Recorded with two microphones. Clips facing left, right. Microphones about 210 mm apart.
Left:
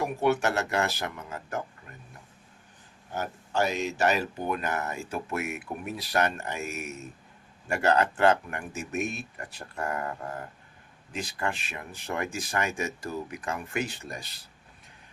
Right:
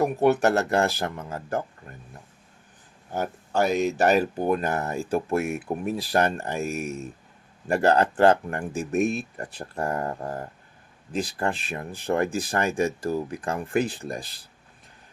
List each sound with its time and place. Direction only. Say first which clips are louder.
0.0 s speech: right 5 dB; 40° right (ahead or behind)
3.2 s speech: right 4 dB; 55° right (ahead or behind); by 14.3 s 30° right (ahead or behind)